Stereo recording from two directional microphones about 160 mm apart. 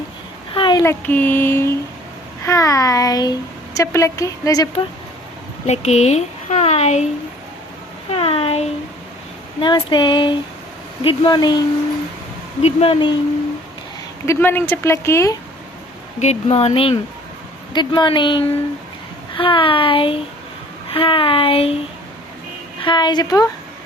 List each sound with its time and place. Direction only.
0.5 s a sound: 30° left (ahead or behind)
0.8 s a child's voice: 15° left (ahead or behind)
5.6 s speech: 45° left (ahead or behind)
8.1 s a sound: 35° left (ahead or behind)
9.6 s a child's voice: 30° left (ahead or behind)
12.6 s speech: 40° left (ahead or behind)
14.3 s speech: 15° left (ahead or behind)
16.2 s speech: 40° left (ahead or behind)
17.7 s a child's voice: 30° left (ahead or behind)
22.8 s a child's voice: 30° left (ahead or behind)